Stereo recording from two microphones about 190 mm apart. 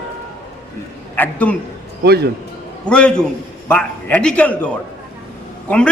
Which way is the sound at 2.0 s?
60° right (ahead or behind).